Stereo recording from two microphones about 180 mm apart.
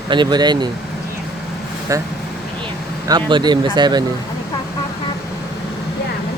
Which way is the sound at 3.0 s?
25° right (ahead or behind).